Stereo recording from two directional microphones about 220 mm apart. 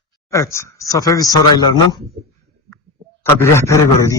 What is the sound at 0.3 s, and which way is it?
A man's voice, 15° left (ahead or behind).